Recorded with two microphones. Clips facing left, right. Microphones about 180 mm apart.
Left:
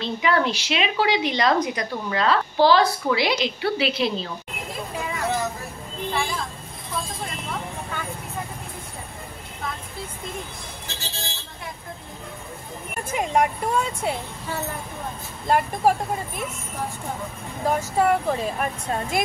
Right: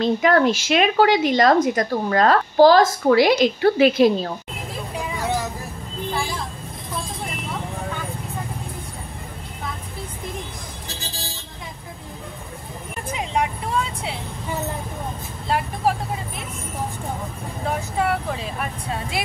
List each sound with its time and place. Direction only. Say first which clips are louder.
0.0 s speech: right 6 dB; 45° right (ahead or behind)
5.0 s vehicle: even; centre (ahead or behind)
10.9 s vehicle: even; 35° right (ahead or behind)
13.1 s speech: left 3 dB; 55° left (ahead or behind)
17.6 s speech: left 3 dB; 35° left (ahead or behind)